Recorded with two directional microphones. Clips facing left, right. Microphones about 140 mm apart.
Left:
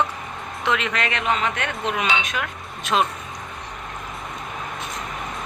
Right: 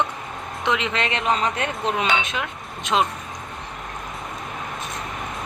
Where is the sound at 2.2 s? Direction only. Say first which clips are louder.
Even; 25° right (ahead or behind).